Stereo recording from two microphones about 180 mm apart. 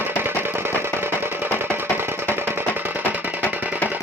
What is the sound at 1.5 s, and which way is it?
Music, 10° right (ahead or behind).